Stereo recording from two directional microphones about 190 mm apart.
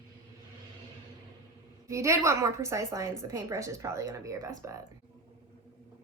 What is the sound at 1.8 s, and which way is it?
Speech, 15° right (ahead or behind).